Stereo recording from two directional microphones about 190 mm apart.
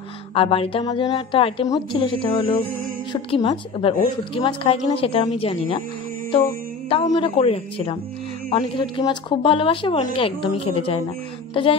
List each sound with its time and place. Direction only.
0.3 s a woman's voice: 30° left (ahead or behind)
6.9 s a woman's voice: 30° left (ahead or behind)